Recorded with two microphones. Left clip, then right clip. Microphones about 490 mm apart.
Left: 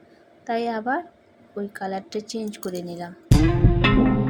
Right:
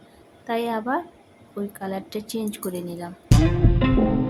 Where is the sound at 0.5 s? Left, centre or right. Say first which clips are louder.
Even; right.